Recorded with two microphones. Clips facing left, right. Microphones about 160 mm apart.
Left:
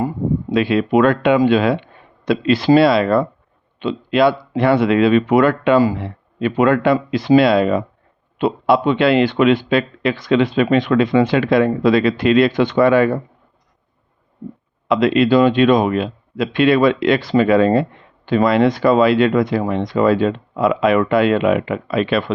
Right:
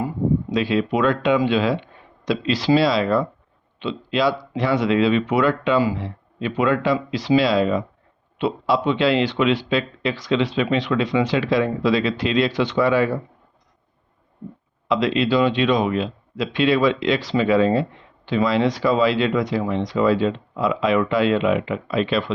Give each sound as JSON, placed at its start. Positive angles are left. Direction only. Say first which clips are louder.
{"t": 0.5, "sound": "speech", "louder": "left 10 dB", "side_deg": 60}
{"t": 14.8, "sound": "speech", "louder": "left 5 dB", "side_deg": 55}